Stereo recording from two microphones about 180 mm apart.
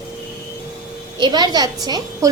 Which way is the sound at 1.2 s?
25° right (ahead or behind).